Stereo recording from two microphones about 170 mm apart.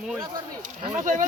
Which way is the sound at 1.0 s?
50° right (ahead or behind).